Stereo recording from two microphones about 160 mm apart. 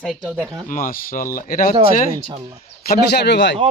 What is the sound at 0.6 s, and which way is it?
A man's voice, 60° left (ahead or behind).